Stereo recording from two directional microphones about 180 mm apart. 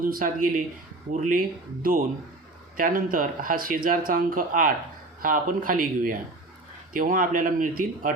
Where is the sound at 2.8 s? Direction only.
50° right (ahead or behind).